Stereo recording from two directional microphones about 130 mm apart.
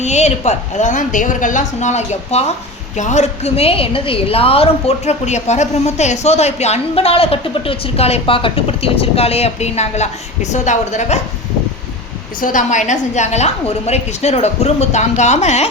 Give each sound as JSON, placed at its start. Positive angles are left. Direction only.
{"t": 0.0, "sound": "a woman's voice", "side_deg": 60}
{"t": 12.4, "sound": "a woman's voice", "side_deg": 85}